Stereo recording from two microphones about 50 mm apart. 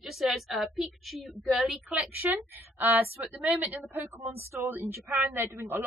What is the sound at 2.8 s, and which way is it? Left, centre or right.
A woman's voice, right.